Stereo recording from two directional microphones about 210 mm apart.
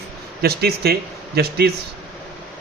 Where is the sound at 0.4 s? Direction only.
50° right (ahead or behind).